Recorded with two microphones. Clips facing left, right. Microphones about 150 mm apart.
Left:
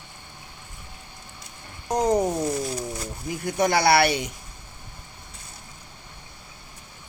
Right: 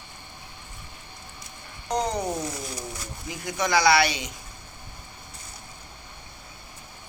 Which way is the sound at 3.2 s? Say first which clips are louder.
Left 5 dB; 55° left (ahead or behind).